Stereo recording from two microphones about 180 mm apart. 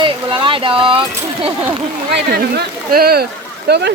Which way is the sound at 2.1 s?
65° right (ahead or behind).